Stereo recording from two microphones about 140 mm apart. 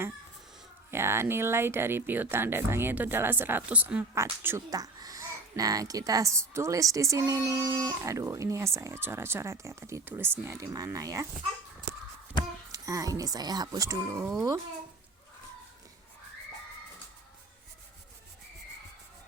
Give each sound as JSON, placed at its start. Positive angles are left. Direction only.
{"t": 0.9, "sound": "speech", "side_deg": -15}
{"t": 12.7, "sound": "speech", "side_deg": -25}